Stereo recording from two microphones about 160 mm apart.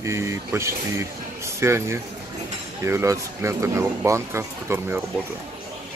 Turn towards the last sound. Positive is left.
turn(degrees=-15)  # may be behind; listen again after turning